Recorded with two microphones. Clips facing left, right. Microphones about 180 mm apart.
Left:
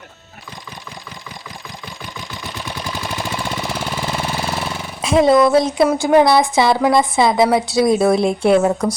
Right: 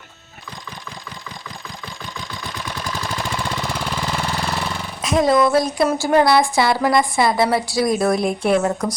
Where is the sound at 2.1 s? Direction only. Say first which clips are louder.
Left 1 dB; 20° left (ahead or behind).